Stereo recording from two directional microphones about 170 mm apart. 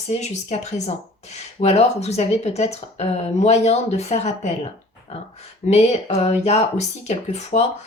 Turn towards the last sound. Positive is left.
turn(degrees=40)  # may be behind; listen again after turning